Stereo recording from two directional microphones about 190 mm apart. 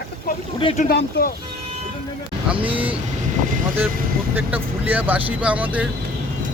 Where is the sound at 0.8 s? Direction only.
55° left (ahead or behind).